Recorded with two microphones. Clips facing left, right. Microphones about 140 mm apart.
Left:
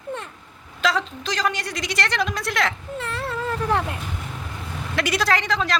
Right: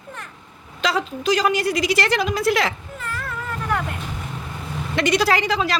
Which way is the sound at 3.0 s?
25° left (ahead or behind).